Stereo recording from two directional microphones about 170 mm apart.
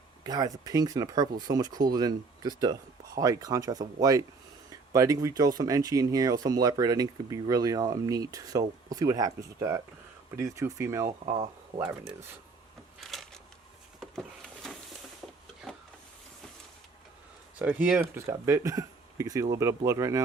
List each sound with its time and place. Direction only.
0.3 s speech: 20° right (ahead or behind)
13.0 s a sound: centre (ahead or behind)
15.6 s printer: centre (ahead or behind)
17.6 s speech: 10° right (ahead or behind)